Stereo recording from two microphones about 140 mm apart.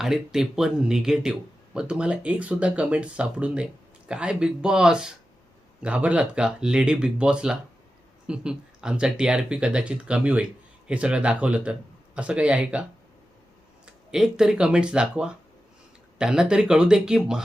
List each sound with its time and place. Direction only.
0.0 s speech: 5° right (ahead or behind)
13.8 s speech: 5° right (ahead or behind)